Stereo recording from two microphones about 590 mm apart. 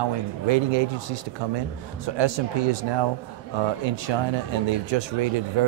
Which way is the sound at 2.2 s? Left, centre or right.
Right.